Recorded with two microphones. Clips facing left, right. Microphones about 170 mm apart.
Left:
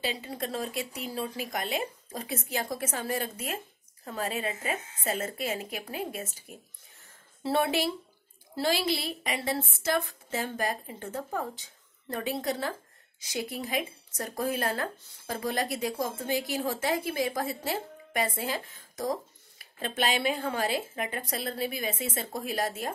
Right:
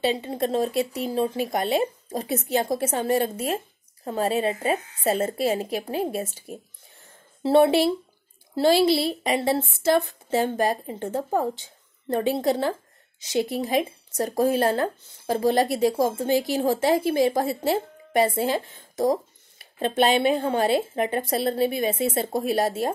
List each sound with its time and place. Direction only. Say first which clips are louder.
0.0 s speech: right 9 dB; 25° right (ahead or behind)